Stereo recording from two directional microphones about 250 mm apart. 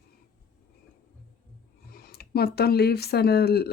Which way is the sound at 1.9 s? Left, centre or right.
Left.